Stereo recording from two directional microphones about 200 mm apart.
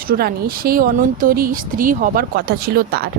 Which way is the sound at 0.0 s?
50° right (ahead or behind).